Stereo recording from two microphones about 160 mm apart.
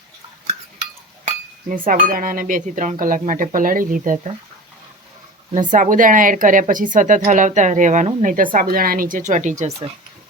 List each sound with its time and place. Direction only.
1.9 s speech: 60° right (ahead or behind)
5.5 s speech: 55° right (ahead or behind)